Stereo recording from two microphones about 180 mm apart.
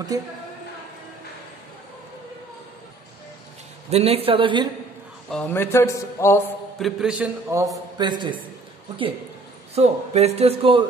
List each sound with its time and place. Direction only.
0.1 s a man's voice: 20° right (ahead or behind)
3.9 s speech: 35° right (ahead or behind)
5.3 s a man's voice: 10° left (ahead or behind)
6.8 s a man's voice: 5° right (ahead or behind)
7.5 s a man's voice: 20° right (ahead or behind)
9.8 s speech: 35° right (ahead or behind)